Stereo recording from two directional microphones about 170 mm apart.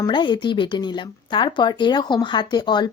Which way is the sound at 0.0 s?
25° left (ahead or behind).